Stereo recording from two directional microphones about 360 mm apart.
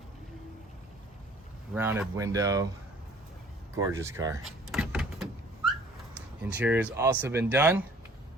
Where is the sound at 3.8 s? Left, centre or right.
Centre.